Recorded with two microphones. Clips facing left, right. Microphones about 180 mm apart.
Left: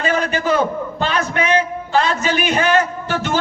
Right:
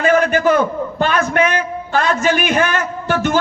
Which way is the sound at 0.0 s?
50° right (ahead or behind).